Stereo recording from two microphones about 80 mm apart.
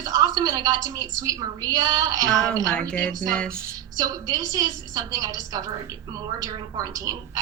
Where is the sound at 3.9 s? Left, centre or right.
Right.